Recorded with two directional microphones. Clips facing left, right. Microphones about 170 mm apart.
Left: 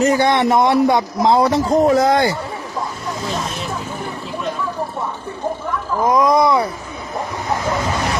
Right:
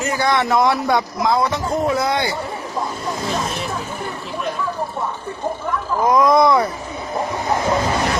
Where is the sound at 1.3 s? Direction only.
35° left (ahead or behind).